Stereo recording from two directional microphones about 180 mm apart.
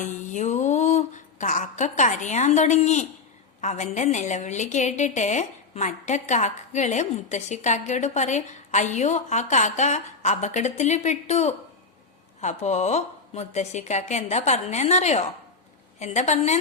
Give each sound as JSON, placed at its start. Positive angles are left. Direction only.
{"t": 0.0, "sound": "a woman's voice", "side_deg": 45}